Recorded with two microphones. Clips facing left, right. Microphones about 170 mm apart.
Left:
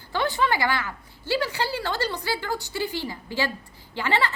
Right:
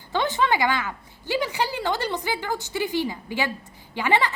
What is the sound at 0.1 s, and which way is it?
A woman's voice, 20° right (ahead or behind).